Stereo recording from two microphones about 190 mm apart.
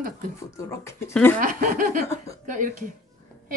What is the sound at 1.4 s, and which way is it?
A woman's voice, 45° right (ahead or behind).